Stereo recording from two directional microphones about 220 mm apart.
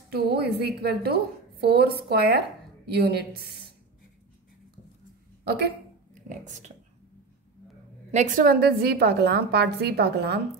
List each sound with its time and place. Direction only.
0.1 s a woman's voice: 45° right (ahead or behind)
5.4 s speech: 50° right (ahead or behind)
8.1 s a woman's voice: 35° right (ahead or behind)